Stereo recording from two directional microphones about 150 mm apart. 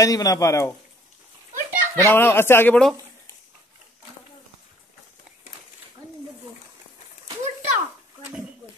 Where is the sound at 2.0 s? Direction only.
15° left (ahead or behind).